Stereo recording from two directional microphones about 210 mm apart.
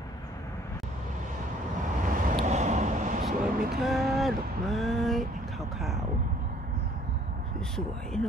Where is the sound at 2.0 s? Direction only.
40° right (ahead or behind).